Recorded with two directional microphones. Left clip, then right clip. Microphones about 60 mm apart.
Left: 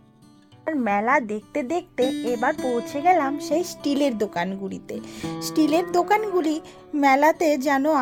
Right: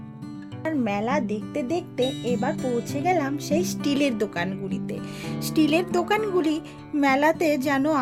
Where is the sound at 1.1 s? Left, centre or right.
Right.